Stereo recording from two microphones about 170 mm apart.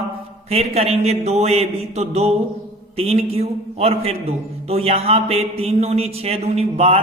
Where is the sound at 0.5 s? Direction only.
40° right (ahead or behind).